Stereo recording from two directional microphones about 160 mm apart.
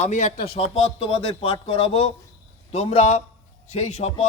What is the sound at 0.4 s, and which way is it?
A man's voice, 35° left (ahead or behind).